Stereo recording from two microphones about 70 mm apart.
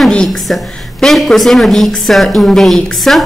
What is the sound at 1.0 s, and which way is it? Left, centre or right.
A woman's voice, centre.